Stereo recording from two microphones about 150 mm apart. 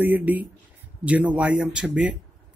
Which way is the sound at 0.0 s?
10° right (ahead or behind).